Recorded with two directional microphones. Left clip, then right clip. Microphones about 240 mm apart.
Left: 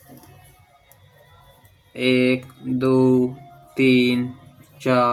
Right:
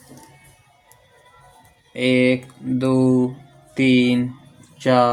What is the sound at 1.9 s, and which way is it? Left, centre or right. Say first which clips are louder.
Speech: right 1 dB; centre.